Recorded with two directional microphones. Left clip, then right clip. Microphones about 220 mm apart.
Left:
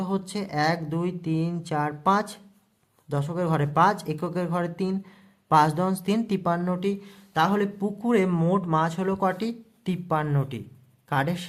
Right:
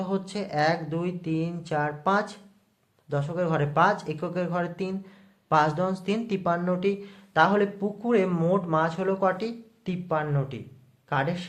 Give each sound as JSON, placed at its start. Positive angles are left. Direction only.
{"t": 0.0, "sound": "speech", "side_deg": 25}